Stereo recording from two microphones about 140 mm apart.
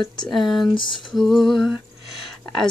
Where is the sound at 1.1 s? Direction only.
Centre (ahead or behind).